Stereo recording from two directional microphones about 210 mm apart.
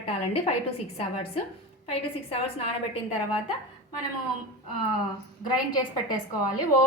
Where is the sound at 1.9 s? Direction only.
30° left (ahead or behind).